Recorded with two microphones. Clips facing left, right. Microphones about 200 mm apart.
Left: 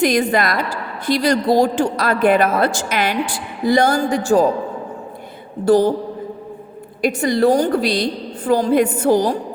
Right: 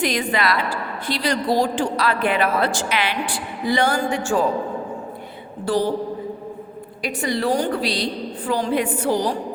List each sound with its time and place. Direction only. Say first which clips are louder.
0.0 s a woman's voice: left 5 dB; 45° left (ahead or behind)
5.6 s a woman's voice: left 7 dB; 45° left (ahead or behind)
7.0 s a woman's voice: left 8 dB; 45° left (ahead or behind)